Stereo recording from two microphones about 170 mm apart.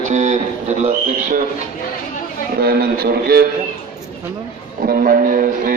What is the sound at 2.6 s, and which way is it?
Speech, 65° right (ahead or behind).